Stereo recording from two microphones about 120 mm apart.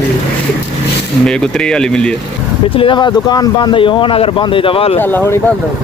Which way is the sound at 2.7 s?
45° left (ahead or behind).